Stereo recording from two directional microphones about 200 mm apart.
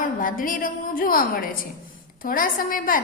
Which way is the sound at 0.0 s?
45° left (ahead or behind).